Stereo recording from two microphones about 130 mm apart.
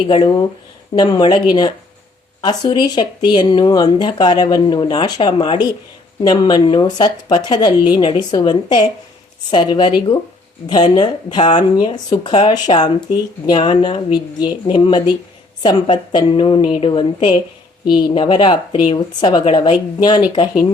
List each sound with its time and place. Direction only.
0.1 s a woman's voice: 40° left (ahead or behind)